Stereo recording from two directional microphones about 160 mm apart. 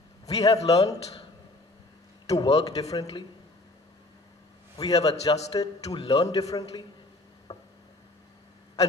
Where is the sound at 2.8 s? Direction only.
20° left (ahead or behind).